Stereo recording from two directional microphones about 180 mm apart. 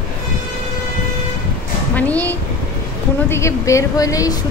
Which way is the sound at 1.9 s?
10° left (ahead or behind).